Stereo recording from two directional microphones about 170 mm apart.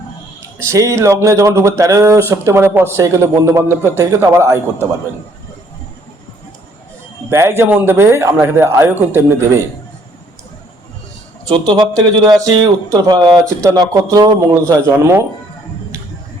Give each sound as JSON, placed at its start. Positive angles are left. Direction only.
{"t": 0.6, "sound": "speech", "side_deg": -15}
{"t": 7.3, "sound": "speech", "side_deg": -15}
{"t": 11.4, "sound": "speech", "side_deg": -25}